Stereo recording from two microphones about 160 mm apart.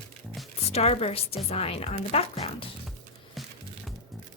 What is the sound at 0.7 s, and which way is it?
Speech, 40° left (ahead or behind).